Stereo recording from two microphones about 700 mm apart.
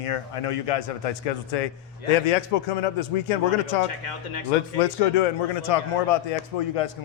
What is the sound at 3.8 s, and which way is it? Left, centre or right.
Speech, left.